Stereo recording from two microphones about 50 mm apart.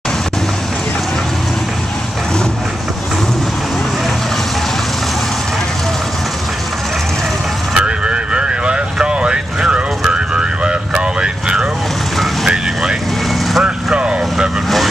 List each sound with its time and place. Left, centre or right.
7.7 s vehicle: centre
13.5 s vehicle: centre
13.9 s vehicle: centre